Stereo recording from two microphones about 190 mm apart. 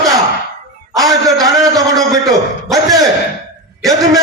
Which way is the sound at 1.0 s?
20° right (ahead or behind).